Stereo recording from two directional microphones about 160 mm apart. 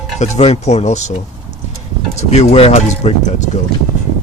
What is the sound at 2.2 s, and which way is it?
Speech, 45° left (ahead or behind).